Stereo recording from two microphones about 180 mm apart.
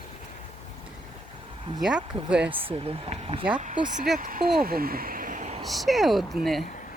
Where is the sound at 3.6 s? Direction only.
45° right (ahead or behind).